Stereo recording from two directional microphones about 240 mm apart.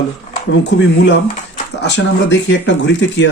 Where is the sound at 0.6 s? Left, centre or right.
Left.